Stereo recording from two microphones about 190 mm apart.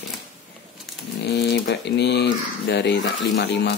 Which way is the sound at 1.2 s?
60° left (ahead or behind).